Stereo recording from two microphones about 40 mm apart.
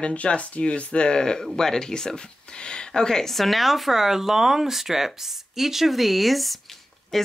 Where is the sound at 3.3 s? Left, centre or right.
Centre.